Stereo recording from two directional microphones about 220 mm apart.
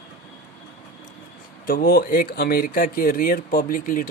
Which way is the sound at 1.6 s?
40° left (ahead or behind).